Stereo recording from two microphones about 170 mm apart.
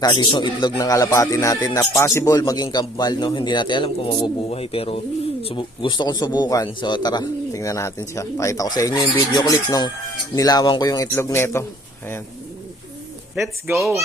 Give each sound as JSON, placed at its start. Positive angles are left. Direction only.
{"t": 0.0, "sound": "a man's voice", "side_deg": 25}
{"t": 13.7, "sound": "speech", "side_deg": 0}